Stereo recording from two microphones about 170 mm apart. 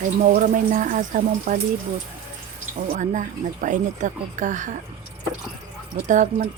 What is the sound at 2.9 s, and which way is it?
Speech, 45° right (ahead or behind).